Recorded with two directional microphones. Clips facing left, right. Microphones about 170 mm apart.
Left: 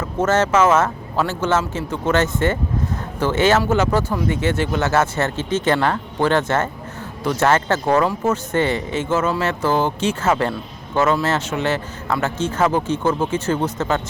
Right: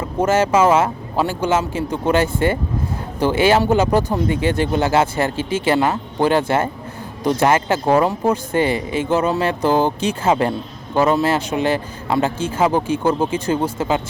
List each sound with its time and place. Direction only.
0.0 s speech: 10° right (ahead or behind)